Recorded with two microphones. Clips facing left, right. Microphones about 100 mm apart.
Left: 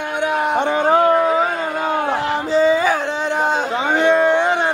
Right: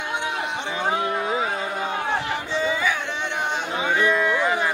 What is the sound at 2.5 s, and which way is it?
Music, 40° left (ahead or behind).